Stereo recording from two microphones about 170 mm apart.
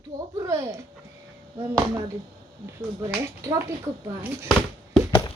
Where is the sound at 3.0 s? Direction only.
15° right (ahead or behind).